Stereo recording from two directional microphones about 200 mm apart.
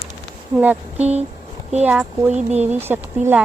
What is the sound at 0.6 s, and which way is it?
A woman's voice, 5° right (ahead or behind).